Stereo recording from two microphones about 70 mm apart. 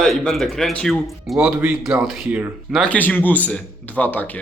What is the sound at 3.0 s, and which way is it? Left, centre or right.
Speech, left.